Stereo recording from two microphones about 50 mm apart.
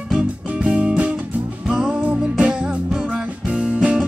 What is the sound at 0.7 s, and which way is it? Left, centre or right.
Music, right.